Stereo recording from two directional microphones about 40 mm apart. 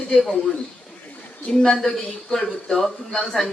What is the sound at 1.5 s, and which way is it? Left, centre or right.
Speech, centre.